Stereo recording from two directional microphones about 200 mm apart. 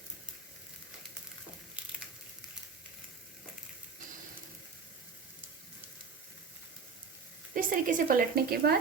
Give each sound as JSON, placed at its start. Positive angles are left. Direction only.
{"t": 7.5, "sound": "a woman's voice", "side_deg": -40}